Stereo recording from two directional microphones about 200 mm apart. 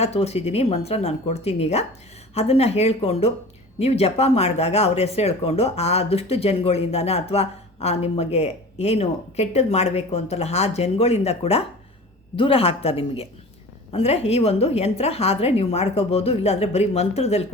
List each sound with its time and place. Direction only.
0.0 s speech: 30° left (ahead or behind)